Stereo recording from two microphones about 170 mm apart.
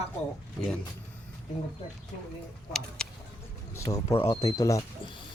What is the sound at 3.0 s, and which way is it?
Vehicle, 5° left (ahead or behind).